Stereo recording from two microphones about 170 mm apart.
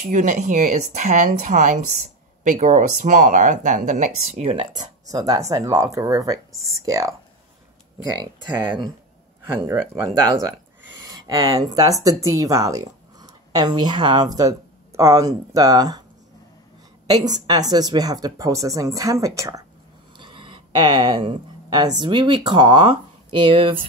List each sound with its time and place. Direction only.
0.0 s speech: 45° right (ahead or behind)
5.1 s a woman's voice: 20° right (ahead or behind)
8.6 s a woman's voice: 30° right (ahead or behind)
17.1 s a woman's voice: 25° right (ahead or behind)
20.2 s a sound: 30° right (ahead or behind)
22.0 s a woman's voice: 25° right (ahead or behind)